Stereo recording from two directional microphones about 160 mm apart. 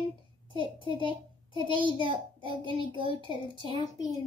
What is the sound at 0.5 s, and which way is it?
A child's voice, 30° left (ahead or behind).